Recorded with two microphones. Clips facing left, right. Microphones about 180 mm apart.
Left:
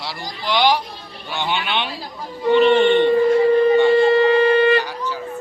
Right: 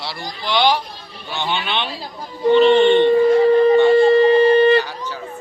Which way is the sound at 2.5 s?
25° right (ahead or behind).